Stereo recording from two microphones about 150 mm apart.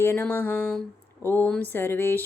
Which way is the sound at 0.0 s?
15° left (ahead or behind).